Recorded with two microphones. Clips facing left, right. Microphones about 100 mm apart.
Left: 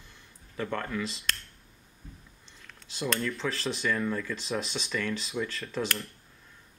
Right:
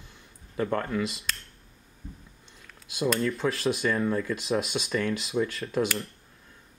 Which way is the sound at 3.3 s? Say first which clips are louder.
Right 5 dB; 10° right (ahead or behind).